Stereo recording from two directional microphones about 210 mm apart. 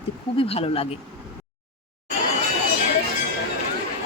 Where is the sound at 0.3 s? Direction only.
25° left (ahead or behind).